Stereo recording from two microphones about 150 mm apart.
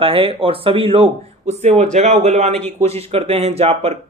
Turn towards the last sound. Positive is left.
turn(degrees=-45)  # may be behind; listen again after turning